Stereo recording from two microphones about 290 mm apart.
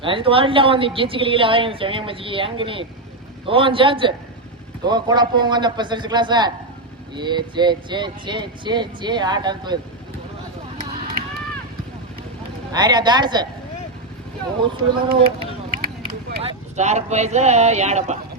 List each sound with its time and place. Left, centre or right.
0.0 s a woman's voice: centre
12.7 s a woman's voice: centre
14.6 s a woman's voice: centre
16.4 s speech: right